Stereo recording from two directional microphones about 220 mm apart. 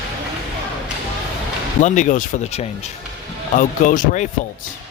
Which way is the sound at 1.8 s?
35° left (ahead or behind).